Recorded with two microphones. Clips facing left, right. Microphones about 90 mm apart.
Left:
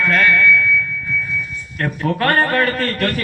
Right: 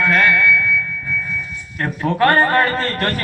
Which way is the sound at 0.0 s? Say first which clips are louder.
Even; 15° right (ahead or behind).